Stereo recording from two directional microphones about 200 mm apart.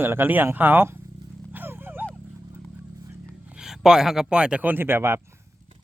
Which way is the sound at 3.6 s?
5° right (ahead or behind).